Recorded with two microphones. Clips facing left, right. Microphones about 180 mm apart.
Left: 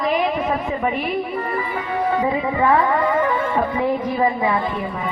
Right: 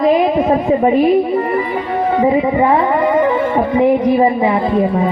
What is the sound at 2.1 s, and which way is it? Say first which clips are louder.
A woman's voice: right 9 dB; 25° right (ahead or behind).